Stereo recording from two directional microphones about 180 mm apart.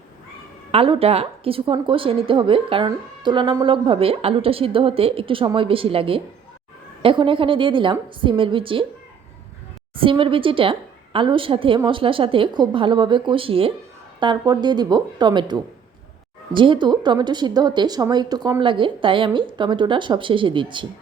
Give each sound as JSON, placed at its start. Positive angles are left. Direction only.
{"t": 0.7, "sound": "a woman's voice", "side_deg": -30}
{"t": 9.9, "sound": "a woman's voice", "side_deg": -30}
{"t": 16.6, "sound": "a woman's voice", "side_deg": -25}